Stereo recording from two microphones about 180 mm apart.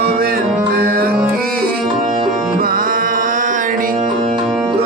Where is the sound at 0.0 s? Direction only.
60° right (ahead or behind).